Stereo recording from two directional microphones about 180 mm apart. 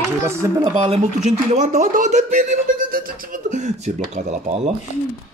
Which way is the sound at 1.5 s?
45° right (ahead or behind).